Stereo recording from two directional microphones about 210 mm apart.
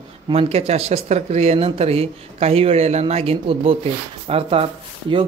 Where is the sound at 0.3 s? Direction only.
30° right (ahead or behind).